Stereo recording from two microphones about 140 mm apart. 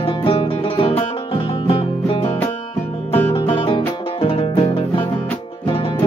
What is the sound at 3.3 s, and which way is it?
Music, 35° left (ahead or behind).